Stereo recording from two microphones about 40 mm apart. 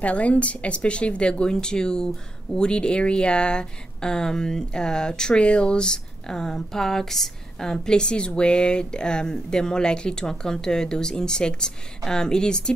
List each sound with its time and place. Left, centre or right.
0.0 s speech: left; by 12.7 s centre